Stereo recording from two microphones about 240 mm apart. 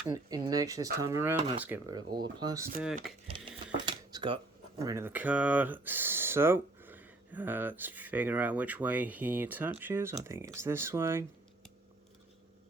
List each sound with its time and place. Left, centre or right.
0.1 s speech: centre
3.1 s speech: centre
3.8 s a sound: centre
4.8 s speech: centre